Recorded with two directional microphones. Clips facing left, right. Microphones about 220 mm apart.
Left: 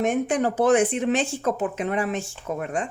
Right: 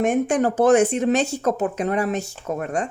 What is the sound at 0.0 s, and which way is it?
Speech, 45° right (ahead or behind).